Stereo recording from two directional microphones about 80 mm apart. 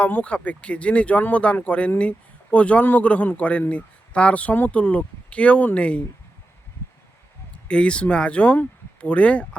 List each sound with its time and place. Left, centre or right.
0.0 s speech: centre
7.7 s speech: centre